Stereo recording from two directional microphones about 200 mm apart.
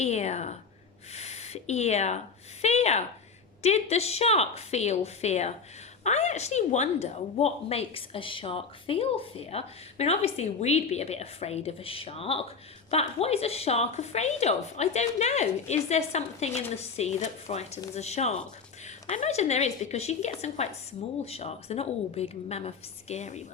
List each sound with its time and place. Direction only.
0.0 s a woman's voice: 35° left (ahead or behind)